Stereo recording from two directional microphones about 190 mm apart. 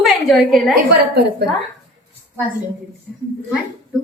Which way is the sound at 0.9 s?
60° right (ahead or behind).